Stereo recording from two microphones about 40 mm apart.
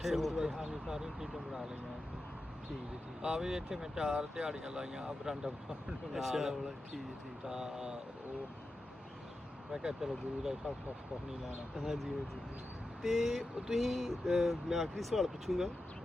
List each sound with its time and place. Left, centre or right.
0.0 s speech: centre
0.3 s speech: centre
3.2 s speech: centre
6.1 s speech: centre
9.7 s speech: centre
11.8 s speech: centre